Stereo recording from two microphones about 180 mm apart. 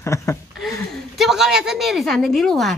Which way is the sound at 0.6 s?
Centre (ahead or behind).